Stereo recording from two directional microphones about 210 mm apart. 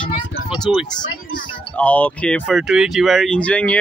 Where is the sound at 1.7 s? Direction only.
5° left (ahead or behind).